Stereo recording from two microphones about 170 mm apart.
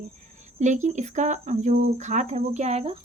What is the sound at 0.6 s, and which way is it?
Speech, 45° right (ahead or behind).